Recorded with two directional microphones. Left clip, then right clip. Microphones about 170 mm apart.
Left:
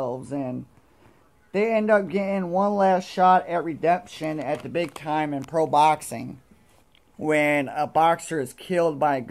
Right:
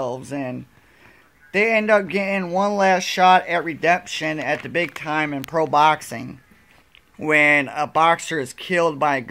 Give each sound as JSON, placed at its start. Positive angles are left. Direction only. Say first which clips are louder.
{"t": 0.0, "sound": "speech", "louder": "right 2 dB", "side_deg": -10}
{"t": 7.2, "sound": "speech", "louder": "right 6 dB", "side_deg": -10}